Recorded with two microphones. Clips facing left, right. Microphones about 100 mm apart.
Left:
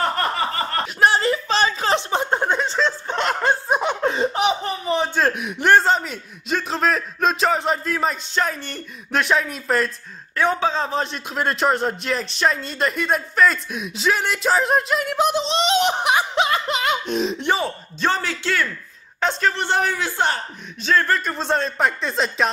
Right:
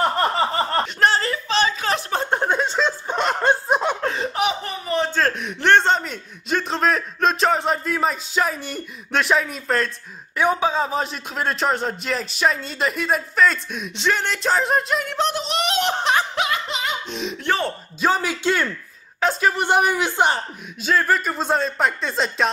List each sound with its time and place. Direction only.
0.0 s a sound: 20° right (ahead or behind)
0.9 s a sound: 15° left (ahead or behind)
1.5 s a sound: 35° left (ahead or behind)
2.3 s snicker: 10° right (ahead or behind)
3.8 s a sound: 15° left (ahead or behind)
10.3 s a man's voice: 15° right (ahead or behind); by 15.4 s 10° left (ahead or behind)
15.4 s speech: 20° left (ahead or behind)
16.3 s music: 35° left (ahead or behind)
16.7 s speech: 55° left (ahead or behind)
17.4 s speech: 15° left (ahead or behind)
17.6 s speech: 10° right (ahead or behind)
19.1 s speech: 5° right (ahead or behind)
20.8 s a man's voice: 5° right (ahead or behind)